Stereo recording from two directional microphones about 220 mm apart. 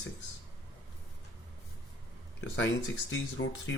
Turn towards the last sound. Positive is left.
turn(degrees=55)  # may be behind; listen again after turning